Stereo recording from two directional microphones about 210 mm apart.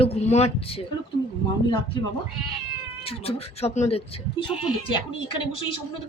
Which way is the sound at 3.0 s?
30° left (ahead or behind).